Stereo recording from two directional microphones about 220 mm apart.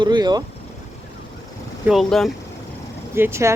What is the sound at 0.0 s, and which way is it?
Speech, 20° right (ahead or behind).